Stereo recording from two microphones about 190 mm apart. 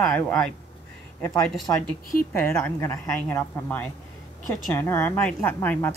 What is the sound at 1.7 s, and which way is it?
A woman's voice, 15° left (ahead or behind).